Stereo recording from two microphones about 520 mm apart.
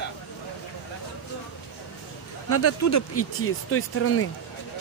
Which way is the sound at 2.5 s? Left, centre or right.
Left.